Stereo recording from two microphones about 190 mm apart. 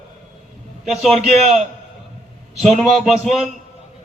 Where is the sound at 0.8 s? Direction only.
Centre (ahead or behind).